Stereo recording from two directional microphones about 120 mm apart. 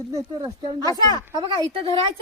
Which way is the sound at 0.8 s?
30° left (ahead or behind).